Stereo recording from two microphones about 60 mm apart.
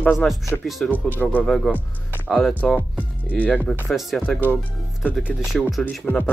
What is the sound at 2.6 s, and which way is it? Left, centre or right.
Speech, left.